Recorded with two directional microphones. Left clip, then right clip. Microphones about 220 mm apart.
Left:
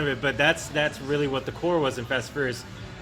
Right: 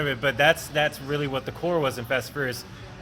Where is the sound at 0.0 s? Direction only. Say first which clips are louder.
Right 2 dB; 30° right (ahead or behind).